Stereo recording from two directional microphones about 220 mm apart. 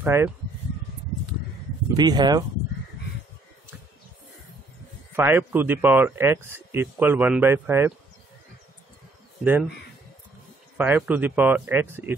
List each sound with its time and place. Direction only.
0.0 s speech: 10° right (ahead or behind)
2.0 s a man's voice: 20° right (ahead or behind)
5.1 s a man's voice: 10° right (ahead or behind)
9.4 s a man's voice: 10° right (ahead or behind)
10.8 s a man's voice: 5° right (ahead or behind)